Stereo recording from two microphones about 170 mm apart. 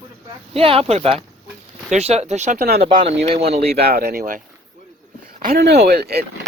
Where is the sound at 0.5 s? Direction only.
35° right (ahead or behind).